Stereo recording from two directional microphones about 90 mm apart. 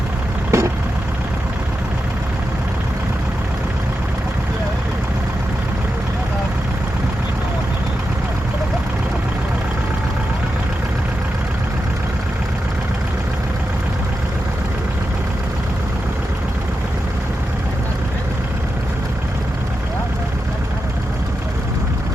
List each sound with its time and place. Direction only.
0.5 s vehicle: 30° right (ahead or behind)